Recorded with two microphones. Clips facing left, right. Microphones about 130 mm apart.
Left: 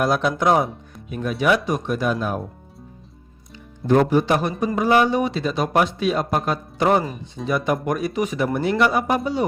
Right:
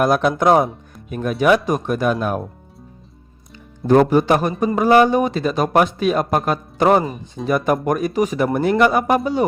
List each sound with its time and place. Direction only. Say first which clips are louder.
0.0 s a man's voice: right 4 dB; 50° right (ahead or behind)
3.8 s a man's voice: right 4 dB; 45° right (ahead or behind)
8.8 s a man's voice: right 4 dB; 55° right (ahead or behind)